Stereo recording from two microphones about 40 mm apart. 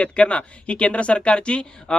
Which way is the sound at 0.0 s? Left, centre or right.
Left.